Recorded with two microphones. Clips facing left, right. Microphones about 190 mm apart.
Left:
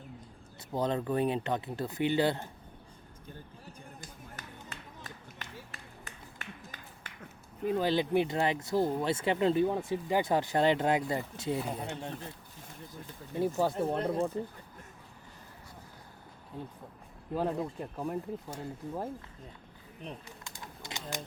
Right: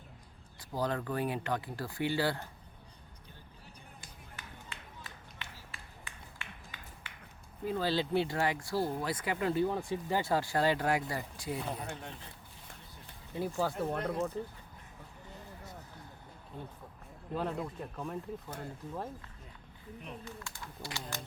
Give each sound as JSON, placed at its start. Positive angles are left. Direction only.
{"t": 0.7, "sound": "speech", "side_deg": 20}
{"t": 4.7, "sound": "music", "side_deg": 40}
{"t": 5.4, "sound": "run", "side_deg": 40}
{"t": 5.7, "sound": "a sound", "side_deg": 45}
{"t": 7.6, "sound": "speech", "side_deg": 20}
{"t": 13.6, "sound": "speech", "side_deg": 25}
{"t": 17.3, "sound": "speech", "side_deg": 20}
{"t": 20.4, "sound": "a sound", "side_deg": 20}